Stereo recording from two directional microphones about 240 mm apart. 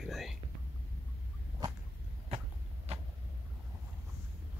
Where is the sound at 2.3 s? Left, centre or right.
Right.